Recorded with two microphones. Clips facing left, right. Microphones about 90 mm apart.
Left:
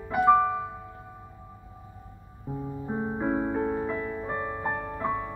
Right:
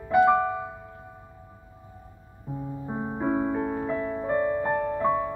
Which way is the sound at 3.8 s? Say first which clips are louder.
Right 3 dB; 25° right (ahead or behind).